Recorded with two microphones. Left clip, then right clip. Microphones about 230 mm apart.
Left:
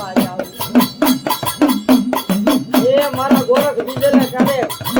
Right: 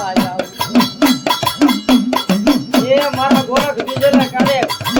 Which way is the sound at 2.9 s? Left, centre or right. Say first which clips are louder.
Right 4 dB; right.